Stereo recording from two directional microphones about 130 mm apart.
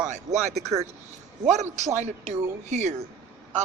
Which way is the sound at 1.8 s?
65° right (ahead or behind).